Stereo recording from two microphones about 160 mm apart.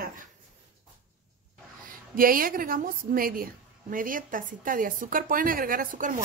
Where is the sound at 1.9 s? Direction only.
60° right (ahead or behind).